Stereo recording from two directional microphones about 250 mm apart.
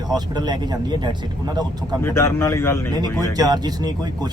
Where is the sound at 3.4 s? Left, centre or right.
Centre.